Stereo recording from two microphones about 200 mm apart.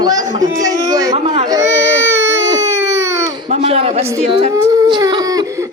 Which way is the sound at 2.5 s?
15° right (ahead or behind).